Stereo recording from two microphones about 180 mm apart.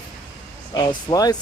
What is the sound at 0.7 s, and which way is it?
Speech, 20° left (ahead or behind).